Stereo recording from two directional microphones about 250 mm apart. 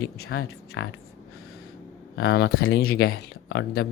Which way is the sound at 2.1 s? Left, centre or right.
Left.